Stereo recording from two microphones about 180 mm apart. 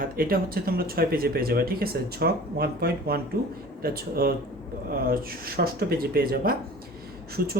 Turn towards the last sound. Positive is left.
turn(degrees=-55)  # may be behind; listen again after turning